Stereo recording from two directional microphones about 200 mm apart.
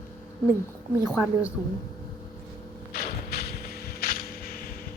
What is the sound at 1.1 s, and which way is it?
Speech, 5° right (ahead or behind).